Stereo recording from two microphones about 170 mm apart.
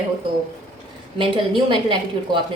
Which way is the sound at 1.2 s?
30° right (ahead or behind).